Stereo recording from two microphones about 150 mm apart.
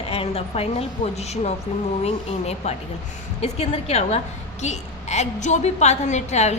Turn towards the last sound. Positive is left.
turn(degrees=50)  # may be behind; listen again after turning